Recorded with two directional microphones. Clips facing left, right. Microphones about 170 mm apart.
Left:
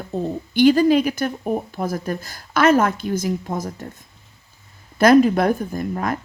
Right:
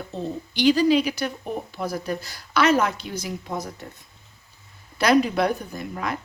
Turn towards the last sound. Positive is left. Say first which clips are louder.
# left 6 dB
turn(degrees=45)  # may be behind; listen again after turning